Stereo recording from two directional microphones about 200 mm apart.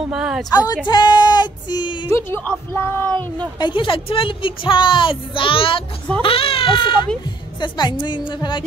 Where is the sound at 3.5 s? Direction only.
25° left (ahead or behind).